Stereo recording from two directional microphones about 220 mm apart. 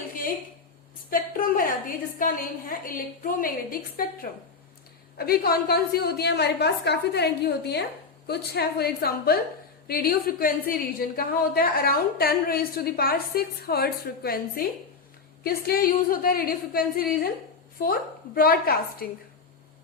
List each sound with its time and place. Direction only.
1.1 s a woman's voice: 40° left (ahead or behind)